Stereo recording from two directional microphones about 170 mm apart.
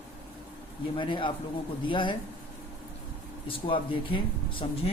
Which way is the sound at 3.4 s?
30° left (ahead or behind).